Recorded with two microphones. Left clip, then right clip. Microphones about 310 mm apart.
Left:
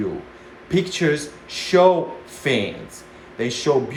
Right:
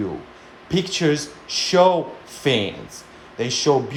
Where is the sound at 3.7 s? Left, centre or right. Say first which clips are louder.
Right 1 dB; centre.